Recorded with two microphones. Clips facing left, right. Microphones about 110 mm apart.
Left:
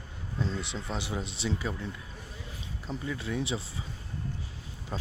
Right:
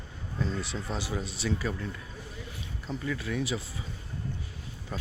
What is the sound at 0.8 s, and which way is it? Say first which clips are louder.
Speech: right 1 dB; 20° left (ahead or behind).